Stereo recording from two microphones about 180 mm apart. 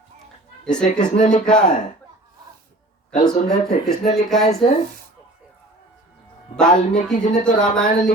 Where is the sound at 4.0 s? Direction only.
40° left (ahead or behind).